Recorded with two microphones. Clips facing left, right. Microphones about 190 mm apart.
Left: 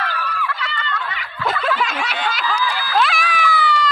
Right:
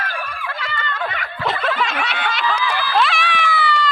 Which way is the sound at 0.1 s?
50° right (ahead or behind).